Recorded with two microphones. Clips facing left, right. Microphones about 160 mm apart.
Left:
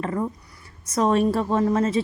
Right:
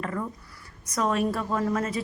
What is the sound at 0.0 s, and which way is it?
A woman's voice, 25° left (ahead or behind).